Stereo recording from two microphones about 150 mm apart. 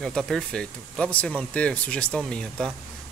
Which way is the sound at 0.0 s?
Centre (ahead or behind).